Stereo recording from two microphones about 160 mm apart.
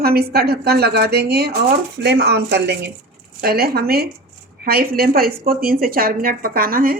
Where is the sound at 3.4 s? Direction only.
75° right (ahead or behind).